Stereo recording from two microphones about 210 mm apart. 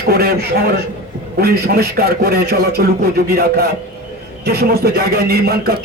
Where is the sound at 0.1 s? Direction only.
50° right (ahead or behind).